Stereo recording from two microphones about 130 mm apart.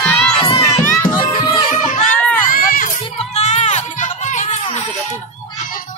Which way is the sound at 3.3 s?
60° left (ahead or behind).